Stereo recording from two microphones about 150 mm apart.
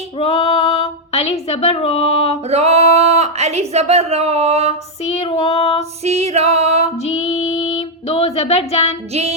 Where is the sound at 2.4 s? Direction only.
45° right (ahead or behind).